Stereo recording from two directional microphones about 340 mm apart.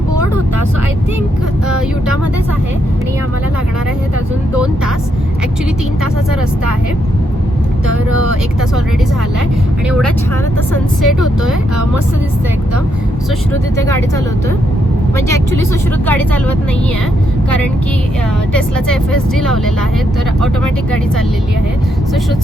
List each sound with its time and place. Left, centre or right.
7.9 s speech: right
11.0 s speech: centre
16.0 s speech: centre
19.4 s speech: centre